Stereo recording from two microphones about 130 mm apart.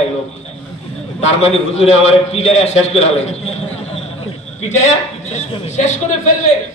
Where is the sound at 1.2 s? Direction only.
60° left (ahead or behind).